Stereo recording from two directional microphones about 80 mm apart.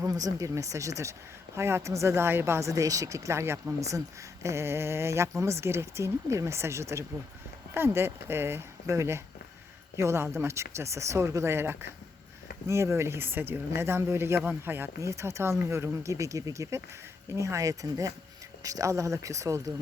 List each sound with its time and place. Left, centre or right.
0.0 s speech: right
15.0 s speech: right